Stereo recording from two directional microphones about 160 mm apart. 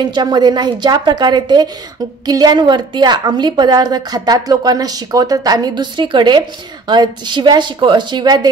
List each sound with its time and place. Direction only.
0.0 s a woman's voice: 25° right (ahead or behind)